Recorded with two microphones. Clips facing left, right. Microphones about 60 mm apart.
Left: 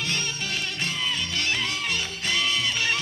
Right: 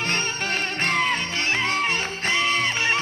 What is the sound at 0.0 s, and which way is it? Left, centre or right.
Music, right.